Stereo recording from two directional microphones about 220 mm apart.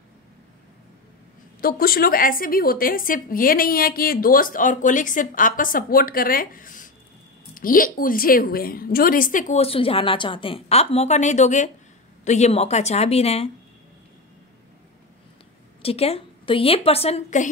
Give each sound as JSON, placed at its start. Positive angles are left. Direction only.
{"t": 1.6, "sound": "a woman's voice", "side_deg": 40}
{"t": 15.8, "sound": "a woman's voice", "side_deg": 25}